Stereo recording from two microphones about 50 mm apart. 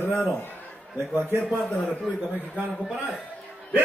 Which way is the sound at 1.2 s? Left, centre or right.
Right.